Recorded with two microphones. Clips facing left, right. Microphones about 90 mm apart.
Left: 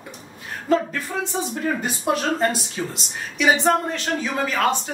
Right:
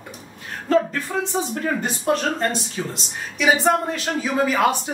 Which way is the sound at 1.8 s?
5° left (ahead or behind).